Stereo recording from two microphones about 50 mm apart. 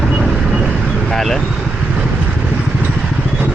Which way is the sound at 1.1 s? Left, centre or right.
Centre.